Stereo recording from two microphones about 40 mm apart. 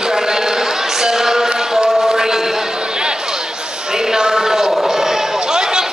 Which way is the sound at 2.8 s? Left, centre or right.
Right.